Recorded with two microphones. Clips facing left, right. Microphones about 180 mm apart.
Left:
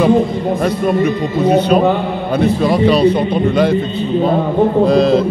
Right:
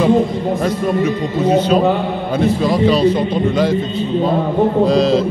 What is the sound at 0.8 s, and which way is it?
A man's voice, 60° left (ahead or behind).